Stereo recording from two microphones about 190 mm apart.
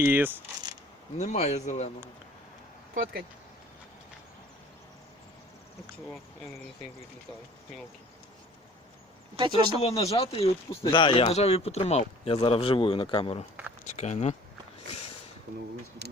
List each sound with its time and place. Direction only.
0.0 s speech: 10° right (ahead or behind)
1.2 s speech: 35° left (ahead or behind)
2.9 s speech: 50° right (ahead or behind)
9.3 s speech: 25° right (ahead or behind)
9.8 s speech: 30° left (ahead or behind)